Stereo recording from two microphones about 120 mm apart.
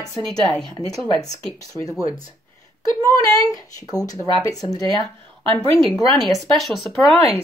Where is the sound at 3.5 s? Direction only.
30° left (ahead or behind).